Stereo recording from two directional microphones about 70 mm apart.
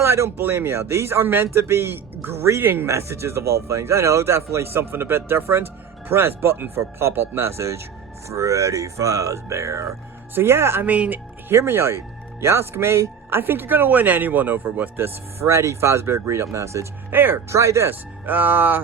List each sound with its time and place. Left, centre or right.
0.0 s speech: right
10.3 s speech: right
10.8 s speech: right
11.5 s speech: right
17.1 s speech: right
17.5 s speech: right
18.3 s speech: right